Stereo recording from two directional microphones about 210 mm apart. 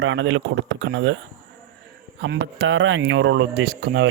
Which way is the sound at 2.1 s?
60° right (ahead or behind).